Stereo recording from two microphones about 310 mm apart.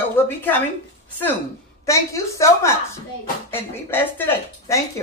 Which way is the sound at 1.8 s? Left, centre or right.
Centre.